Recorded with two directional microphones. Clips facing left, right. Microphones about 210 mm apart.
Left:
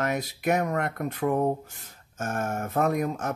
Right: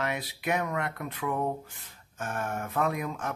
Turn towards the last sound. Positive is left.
turn(degrees=45)  # may be behind; listen again after turning